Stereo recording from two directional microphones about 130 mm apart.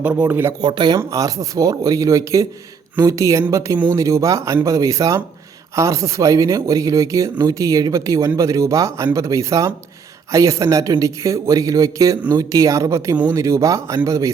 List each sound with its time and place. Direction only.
0.0 s speech: 15° right (ahead or behind)
0.6 s speech: 35° right (ahead or behind)
0.9 s speech: 25° right (ahead or behind)